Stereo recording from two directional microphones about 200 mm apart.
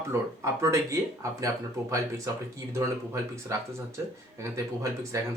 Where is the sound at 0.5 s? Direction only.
15° right (ahead or behind).